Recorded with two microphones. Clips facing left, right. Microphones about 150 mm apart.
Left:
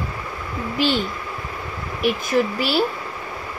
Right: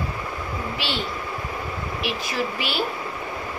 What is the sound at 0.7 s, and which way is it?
Speech, 45° left (ahead or behind).